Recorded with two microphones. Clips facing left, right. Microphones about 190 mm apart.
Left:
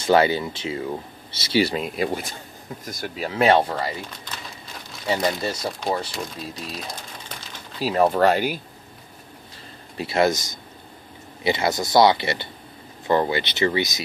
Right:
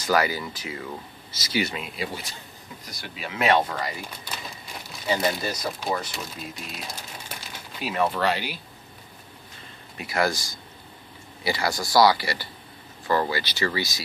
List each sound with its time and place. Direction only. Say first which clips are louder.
0.0 s speech: left 6 dB; 25° left (ahead or behind)
2.0 s speech: left 8 dB; 50° left (ahead or behind); by 3.9 s 30° left (ahead or behind)
5.0 s speech: left 2 dB; 30° left (ahead or behind)
7.8 s speech: left 6 dB; 35° left (ahead or behind)
9.9 s speech: left 5 dB; 25° left (ahead or behind)